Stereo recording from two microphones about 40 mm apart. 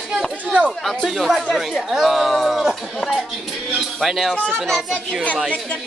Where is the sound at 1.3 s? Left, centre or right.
Centre.